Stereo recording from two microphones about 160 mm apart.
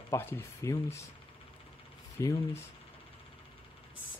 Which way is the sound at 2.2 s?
20° left (ahead or behind).